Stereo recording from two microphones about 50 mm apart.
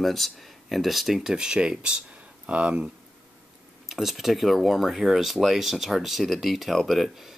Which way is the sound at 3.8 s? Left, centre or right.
Centre.